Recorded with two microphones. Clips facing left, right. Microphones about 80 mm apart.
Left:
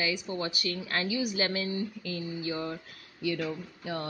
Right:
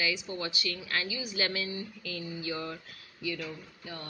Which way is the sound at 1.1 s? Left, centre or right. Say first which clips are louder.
Left 8 dB; left.